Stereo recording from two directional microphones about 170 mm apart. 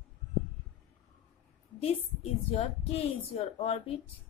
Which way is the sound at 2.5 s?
35° left (ahead or behind).